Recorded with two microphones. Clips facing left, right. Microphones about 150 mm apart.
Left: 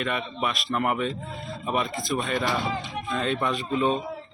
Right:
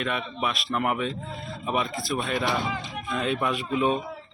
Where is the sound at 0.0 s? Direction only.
Centre (ahead or behind).